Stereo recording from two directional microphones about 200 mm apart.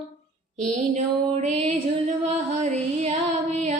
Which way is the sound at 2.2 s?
35° right (ahead or behind).